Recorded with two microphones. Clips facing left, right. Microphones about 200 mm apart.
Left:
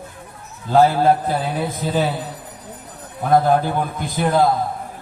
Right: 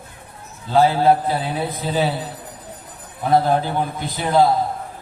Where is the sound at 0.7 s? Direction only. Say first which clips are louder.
Left 1 dB; 45° left (ahead or behind).